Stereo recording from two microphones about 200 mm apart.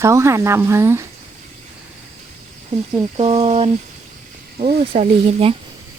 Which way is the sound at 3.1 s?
30° right (ahead or behind).